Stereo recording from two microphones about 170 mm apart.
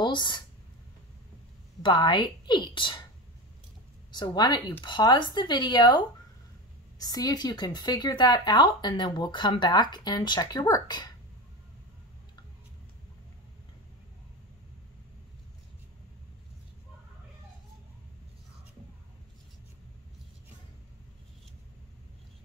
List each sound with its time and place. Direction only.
0.0 s speech: 25° left (ahead or behind)
1.8 s speech: 25° left (ahead or behind)
4.1 s speech: 25° left (ahead or behind)